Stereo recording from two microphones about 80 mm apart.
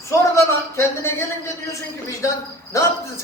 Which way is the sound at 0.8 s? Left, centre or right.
Left.